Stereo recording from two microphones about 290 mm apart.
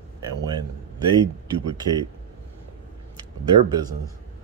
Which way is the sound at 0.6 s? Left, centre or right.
Centre.